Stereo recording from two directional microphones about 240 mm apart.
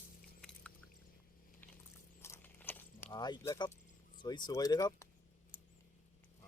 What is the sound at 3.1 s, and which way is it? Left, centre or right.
Speech, centre.